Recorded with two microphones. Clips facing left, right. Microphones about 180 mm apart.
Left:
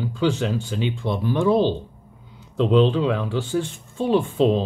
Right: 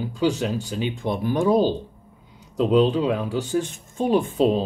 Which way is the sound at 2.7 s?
40° right (ahead or behind).